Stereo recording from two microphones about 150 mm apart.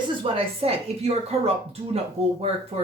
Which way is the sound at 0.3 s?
40° right (ahead or behind).